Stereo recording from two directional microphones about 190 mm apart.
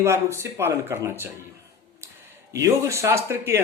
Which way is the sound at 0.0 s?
15° right (ahead or behind).